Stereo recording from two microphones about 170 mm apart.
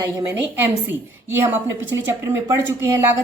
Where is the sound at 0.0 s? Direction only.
20° right (ahead or behind).